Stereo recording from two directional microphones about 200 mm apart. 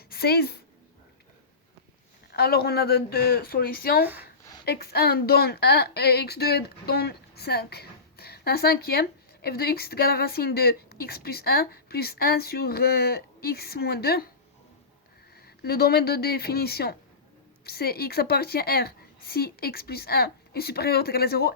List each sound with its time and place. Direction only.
0.1 s a woman's voice: 50° left (ahead or behind)
2.3 s a woman's voice: 50° left (ahead or behind)
4.0 s speech: 10° right (ahead or behind)
4.6 s a woman's voice: 50° left (ahead or behind)
15.6 s a woman's voice: 50° left (ahead or behind)